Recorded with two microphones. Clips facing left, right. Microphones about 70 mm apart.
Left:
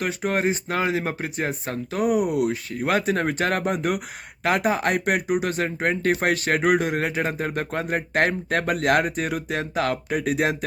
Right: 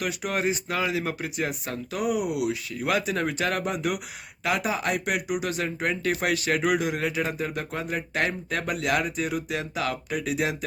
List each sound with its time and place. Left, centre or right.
0.0 s speech: left